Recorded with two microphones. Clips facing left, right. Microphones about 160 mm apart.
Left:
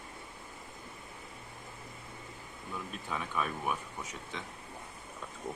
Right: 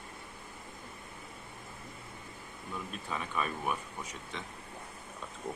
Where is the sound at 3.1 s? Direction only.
Centre (ahead or behind).